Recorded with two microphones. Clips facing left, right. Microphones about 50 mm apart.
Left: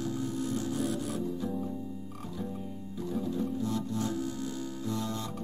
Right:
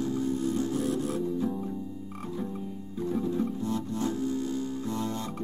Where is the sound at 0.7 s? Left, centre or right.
Right.